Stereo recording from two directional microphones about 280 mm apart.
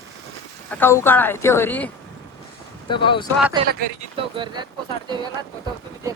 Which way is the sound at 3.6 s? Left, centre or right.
Centre.